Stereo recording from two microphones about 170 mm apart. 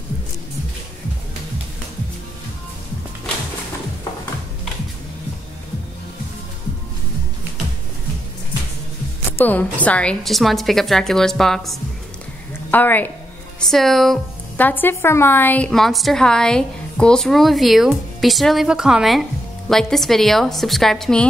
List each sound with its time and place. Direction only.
9.4 s a woman's voice: 10° left (ahead or behind)